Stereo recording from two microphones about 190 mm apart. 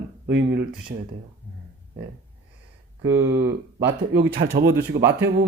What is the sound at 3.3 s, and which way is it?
Speech, 65° right (ahead or behind).